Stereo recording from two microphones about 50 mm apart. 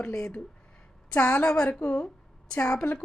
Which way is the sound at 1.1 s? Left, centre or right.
Left.